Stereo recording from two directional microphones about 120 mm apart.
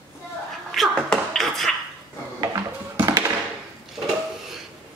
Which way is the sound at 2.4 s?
30° right (ahead or behind).